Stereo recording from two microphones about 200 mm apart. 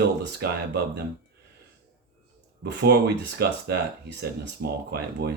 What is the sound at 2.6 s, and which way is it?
Speech, 60° right (ahead or behind).